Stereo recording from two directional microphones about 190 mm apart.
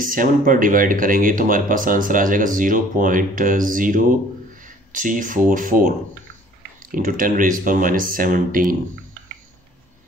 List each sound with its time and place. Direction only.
0.0 s speech: 45° right (ahead or behind)
4.6 s a sound: 45° right (ahead or behind)
5.5 s speech: 45° right (ahead or behind)